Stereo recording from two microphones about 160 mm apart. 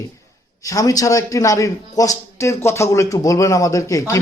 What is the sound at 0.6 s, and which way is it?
A man's voice, 20° left (ahead or behind).